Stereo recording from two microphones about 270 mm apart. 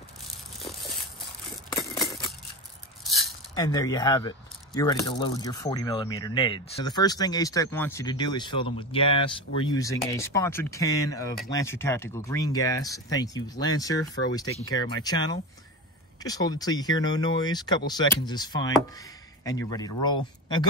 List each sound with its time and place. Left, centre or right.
3.0 s keys jangling: centre
3.5 s speech: centre
14.4 s speech: left
14.7 s speech: centre